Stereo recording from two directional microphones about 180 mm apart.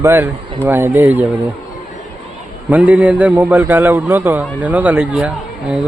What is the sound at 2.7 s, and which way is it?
Speech, 10° right (ahead or behind).